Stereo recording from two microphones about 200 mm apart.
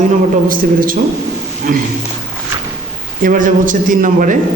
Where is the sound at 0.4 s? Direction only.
45° right (ahead or behind).